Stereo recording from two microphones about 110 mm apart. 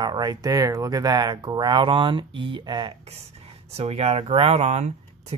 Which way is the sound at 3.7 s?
65° right (ahead or behind).